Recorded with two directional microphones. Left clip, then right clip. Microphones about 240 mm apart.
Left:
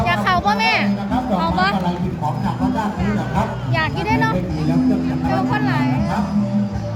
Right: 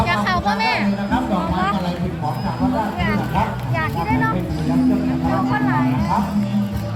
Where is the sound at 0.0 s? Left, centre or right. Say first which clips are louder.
Left 2 dB; left.